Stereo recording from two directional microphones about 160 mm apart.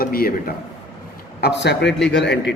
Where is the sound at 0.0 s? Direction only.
65° left (ahead or behind).